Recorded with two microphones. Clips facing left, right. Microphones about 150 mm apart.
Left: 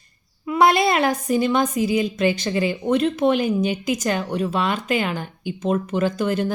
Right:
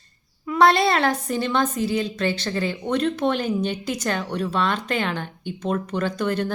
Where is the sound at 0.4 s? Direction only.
10° left (ahead or behind).